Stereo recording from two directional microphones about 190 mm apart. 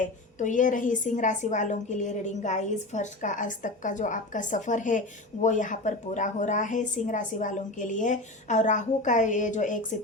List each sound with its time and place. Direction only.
0.3 s a woman's voice: 40° left (ahead or behind)